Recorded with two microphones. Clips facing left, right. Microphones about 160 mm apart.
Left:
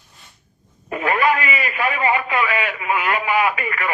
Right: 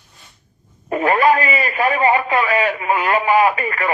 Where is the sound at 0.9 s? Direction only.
35° right (ahead or behind).